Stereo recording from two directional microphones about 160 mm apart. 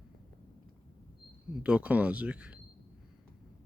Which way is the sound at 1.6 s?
10° right (ahead or behind).